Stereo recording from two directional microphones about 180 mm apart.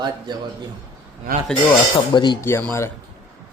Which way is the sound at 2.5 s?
15° left (ahead or behind).